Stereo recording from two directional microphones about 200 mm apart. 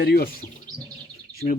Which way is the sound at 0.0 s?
50° left (ahead or behind).